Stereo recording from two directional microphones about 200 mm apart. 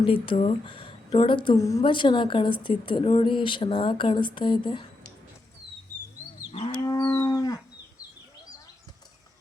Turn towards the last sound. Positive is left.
turn(degrees=20)  # may be behind; listen again after turning